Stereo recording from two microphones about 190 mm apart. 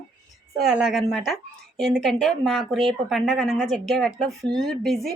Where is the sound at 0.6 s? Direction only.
5° right (ahead or behind).